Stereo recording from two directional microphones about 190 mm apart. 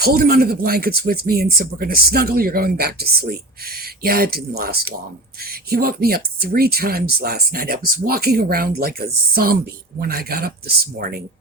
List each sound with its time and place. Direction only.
0.0 s speech: 55° right (ahead or behind)